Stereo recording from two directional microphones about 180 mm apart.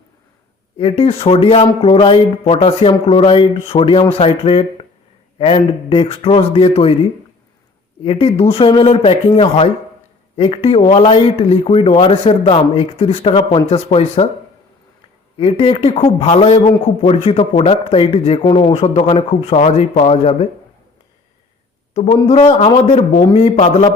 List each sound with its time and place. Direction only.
0.8 s speech: 30° left (ahead or behind)
15.4 s speech: 30° left (ahead or behind)
21.9 s speech: 35° left (ahead or behind)